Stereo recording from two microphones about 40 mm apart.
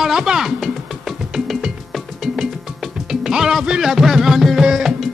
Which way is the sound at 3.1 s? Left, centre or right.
Centre.